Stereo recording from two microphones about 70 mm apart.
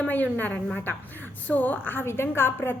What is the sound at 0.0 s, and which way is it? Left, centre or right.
A woman's voice, left.